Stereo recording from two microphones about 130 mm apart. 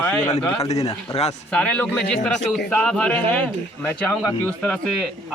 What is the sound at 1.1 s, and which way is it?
Speech, 55° left (ahead or behind).